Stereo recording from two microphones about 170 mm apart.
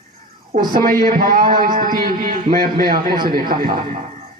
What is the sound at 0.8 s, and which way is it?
A man's voice, 55° right (ahead or behind).